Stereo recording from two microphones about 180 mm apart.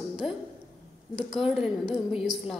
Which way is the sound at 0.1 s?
5° right (ahead or behind).